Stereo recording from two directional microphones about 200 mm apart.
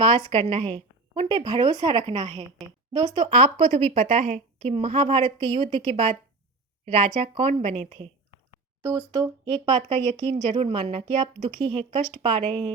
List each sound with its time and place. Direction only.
0.0 s a woman's voice: 25° right (ahead or behind)
8.8 s a woman's voice: 15° right (ahead or behind)